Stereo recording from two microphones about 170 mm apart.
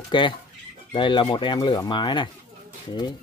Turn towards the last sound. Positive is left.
turn(degrees=25)  # may be behind; listen again after turning